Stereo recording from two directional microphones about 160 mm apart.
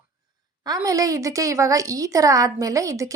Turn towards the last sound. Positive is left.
turn(degrees=-20)  # may be behind; listen again after turning